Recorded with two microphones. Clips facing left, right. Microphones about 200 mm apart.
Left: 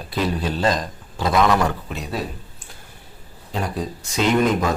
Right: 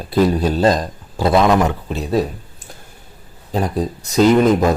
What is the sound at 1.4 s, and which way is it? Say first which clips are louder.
Speech: right 1 dB; 20° right (ahead or behind).